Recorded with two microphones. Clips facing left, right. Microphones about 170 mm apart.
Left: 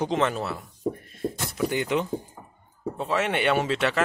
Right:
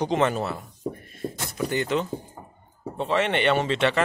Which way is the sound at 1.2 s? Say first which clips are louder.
Left 3 dB; centre (ahead or behind).